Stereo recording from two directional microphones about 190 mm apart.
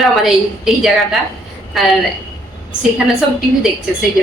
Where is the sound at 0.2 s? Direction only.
Centre (ahead or behind).